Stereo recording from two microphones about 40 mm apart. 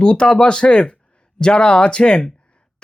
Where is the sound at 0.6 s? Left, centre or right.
Left.